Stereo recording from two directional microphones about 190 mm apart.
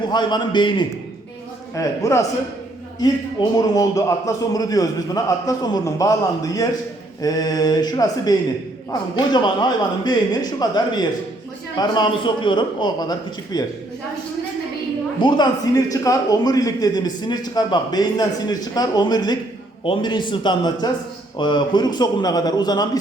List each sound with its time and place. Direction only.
0.1 s a man's voice: 20° left (ahead or behind)
3.6 s a man's voice: 20° left (ahead or behind)
15.2 s a man's voice: 20° left (ahead or behind)